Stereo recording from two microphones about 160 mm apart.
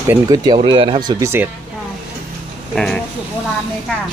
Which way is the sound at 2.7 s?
5° left (ahead or behind).